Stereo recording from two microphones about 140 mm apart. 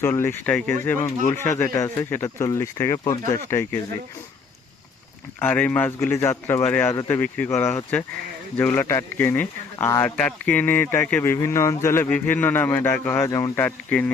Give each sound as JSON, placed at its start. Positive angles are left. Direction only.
{"t": 0.0, "sound": "speech", "side_deg": 15}
{"t": 5.4, "sound": "speech", "side_deg": 10}
{"t": 13.6, "sound": "speech", "side_deg": 10}